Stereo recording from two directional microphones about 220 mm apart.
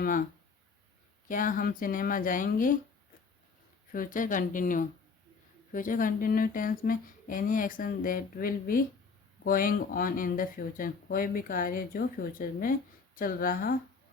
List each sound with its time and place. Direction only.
0.0 s speech: 40° left (ahead or behind)
1.3 s speech: 40° left (ahead or behind)
3.9 s speech: 40° left (ahead or behind)